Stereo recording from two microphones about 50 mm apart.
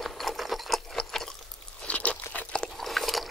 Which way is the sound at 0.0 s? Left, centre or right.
Centre.